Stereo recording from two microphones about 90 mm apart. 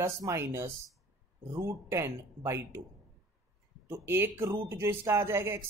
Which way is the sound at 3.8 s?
25° right (ahead or behind).